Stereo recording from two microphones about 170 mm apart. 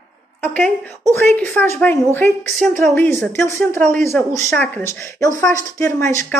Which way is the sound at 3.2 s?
15° left (ahead or behind).